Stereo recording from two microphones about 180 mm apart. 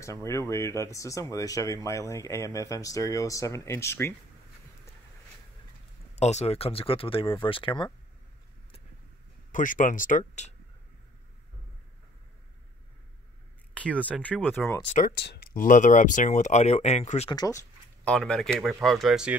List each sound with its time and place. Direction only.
0.0 s speech: 15° left (ahead or behind)
6.1 s speech: 35° left (ahead or behind)
9.5 s speech: 45° left (ahead or behind)
14.2 s speech: 10° left (ahead or behind)
14.9 s speech: 45° left (ahead or behind)
15.1 s speech: 65° left (ahead or behind); by 17.3 s 40° left (ahead or behind)
17.3 s speech: 20° left (ahead or behind)
18.0 s speech: 5° left (ahead or behind)